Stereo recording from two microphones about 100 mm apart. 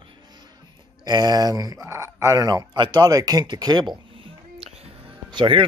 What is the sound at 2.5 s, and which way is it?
Speech, 45° right (ahead or behind).